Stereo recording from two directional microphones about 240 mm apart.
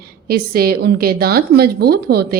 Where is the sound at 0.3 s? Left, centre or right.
Right.